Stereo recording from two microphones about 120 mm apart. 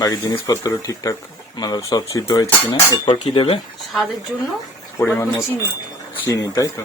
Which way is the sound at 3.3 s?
50° left (ahead or behind).